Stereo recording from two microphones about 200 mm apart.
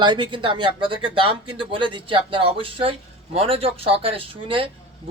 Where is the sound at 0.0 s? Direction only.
20° right (ahead or behind).